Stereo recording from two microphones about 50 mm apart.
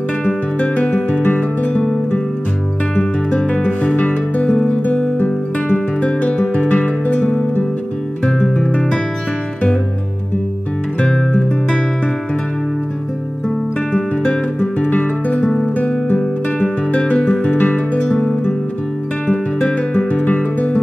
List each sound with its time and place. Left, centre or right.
0.6 s music: left
3.0 s music: left
13.9 s guitar: centre
16.2 s guitar: centre
17.6 s music: left
19.2 s music: centre